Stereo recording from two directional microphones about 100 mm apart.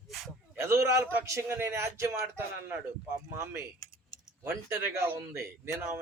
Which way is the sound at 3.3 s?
30° right (ahead or behind).